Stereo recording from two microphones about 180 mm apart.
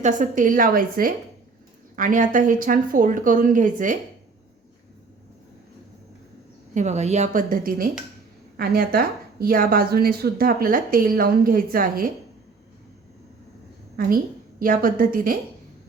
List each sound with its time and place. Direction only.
0.0 s speech: 45° right (ahead or behind)
6.7 s a woman's voice: 40° right (ahead or behind)
14.0 s speech: 50° right (ahead or behind)